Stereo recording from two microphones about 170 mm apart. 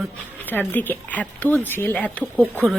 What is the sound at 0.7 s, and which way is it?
A woman's voice, 10° left (ahead or behind).